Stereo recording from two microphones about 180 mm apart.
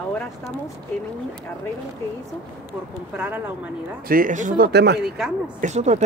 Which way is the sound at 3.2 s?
10° right (ahead or behind).